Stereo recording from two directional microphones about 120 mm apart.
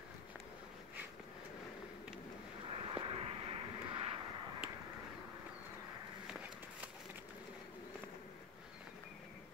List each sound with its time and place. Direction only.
2.7 s vehicle: 50° right (ahead or behind)